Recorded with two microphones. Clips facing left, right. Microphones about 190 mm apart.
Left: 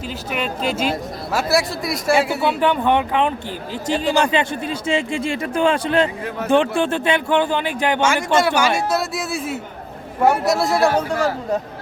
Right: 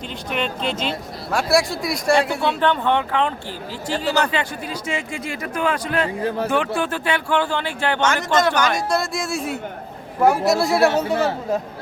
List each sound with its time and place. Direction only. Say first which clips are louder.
0.3 s a woman's voice: left 1 dB; 5° left (ahead or behind)